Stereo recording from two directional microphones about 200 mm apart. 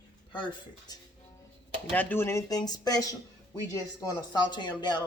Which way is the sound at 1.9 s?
10° left (ahead or behind).